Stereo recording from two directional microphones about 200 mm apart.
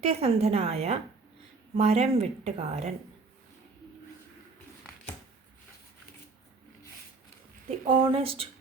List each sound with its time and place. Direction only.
0.0 s a woman's voice: 30° right (ahead or behind)
7.7 s speech: 25° right (ahead or behind)